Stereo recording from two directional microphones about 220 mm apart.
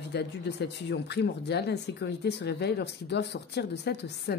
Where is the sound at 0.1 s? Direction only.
50° left (ahead or behind).